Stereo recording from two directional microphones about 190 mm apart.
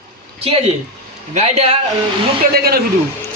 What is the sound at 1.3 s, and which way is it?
Speech, 35° right (ahead or behind).